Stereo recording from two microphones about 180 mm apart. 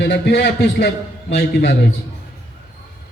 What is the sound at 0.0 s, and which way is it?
Speech, 75° left (ahead or behind).